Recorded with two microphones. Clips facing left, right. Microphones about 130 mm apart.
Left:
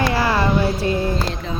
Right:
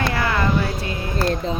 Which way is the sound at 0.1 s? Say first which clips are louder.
Left 3 dB; 30° left (ahead or behind).